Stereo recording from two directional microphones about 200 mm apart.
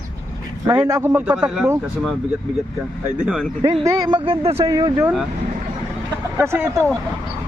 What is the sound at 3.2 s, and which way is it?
Speech, 5° right (ahead or behind).